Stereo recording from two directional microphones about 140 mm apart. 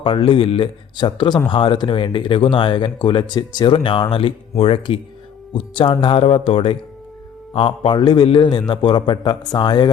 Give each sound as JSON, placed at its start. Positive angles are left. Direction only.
{"t": 0.0, "sound": "speech", "side_deg": 40}